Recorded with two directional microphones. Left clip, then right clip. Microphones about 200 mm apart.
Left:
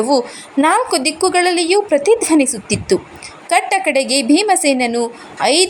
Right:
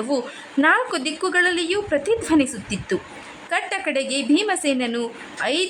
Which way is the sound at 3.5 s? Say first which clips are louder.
Left 9 dB; 15° left (ahead or behind).